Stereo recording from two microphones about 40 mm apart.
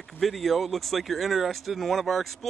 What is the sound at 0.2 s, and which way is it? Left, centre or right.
Speech, centre.